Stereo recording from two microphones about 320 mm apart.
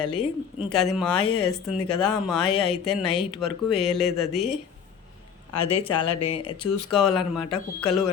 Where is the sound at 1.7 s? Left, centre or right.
Left.